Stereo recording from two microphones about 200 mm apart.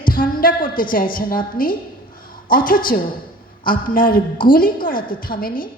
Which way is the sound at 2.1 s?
45° left (ahead or behind).